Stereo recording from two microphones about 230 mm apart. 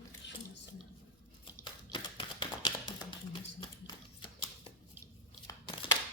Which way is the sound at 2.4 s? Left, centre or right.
Centre.